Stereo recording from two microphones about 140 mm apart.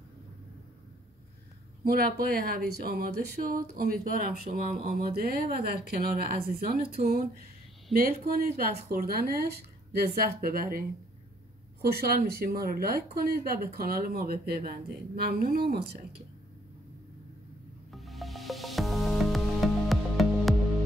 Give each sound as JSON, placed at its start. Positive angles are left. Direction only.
{"t": 1.9, "sound": "speech", "side_deg": -90}
{"t": 11.8, "sound": "speech", "side_deg": -90}
{"t": 17.9, "sound": "music", "side_deg": 0}